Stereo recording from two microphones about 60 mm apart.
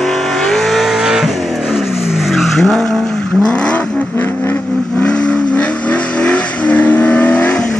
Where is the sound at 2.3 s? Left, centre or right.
Centre.